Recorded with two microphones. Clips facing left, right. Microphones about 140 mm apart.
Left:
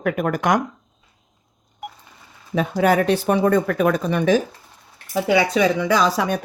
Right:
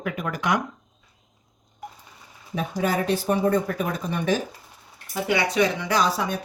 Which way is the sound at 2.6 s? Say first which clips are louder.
Left 7 dB; 70° left (ahead or behind).